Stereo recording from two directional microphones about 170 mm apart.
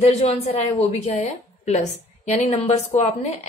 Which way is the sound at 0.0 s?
40° left (ahead or behind).